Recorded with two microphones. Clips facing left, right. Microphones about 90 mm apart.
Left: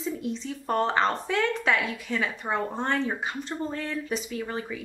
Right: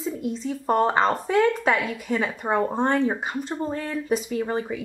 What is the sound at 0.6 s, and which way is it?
Speech, 20° right (ahead or behind).